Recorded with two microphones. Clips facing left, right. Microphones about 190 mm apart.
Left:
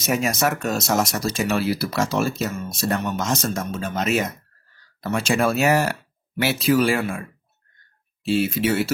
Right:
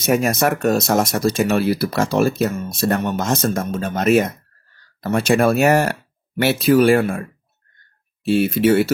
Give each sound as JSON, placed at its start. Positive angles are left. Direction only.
{"t": 0.0, "sound": "speech", "side_deg": -55}
{"t": 8.2, "sound": "speech", "side_deg": -55}